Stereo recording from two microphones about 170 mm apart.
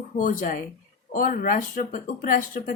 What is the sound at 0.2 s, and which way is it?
A woman's voice, 50° left (ahead or behind).